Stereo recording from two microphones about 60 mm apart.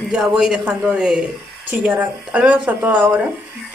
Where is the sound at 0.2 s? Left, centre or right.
Centre.